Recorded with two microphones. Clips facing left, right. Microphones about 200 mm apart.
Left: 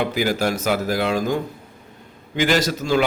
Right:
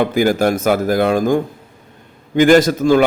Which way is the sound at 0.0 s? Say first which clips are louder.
Right 6 dB; 50° right (ahead or behind).